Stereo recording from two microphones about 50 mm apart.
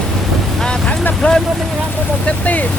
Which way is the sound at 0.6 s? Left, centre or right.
Centre.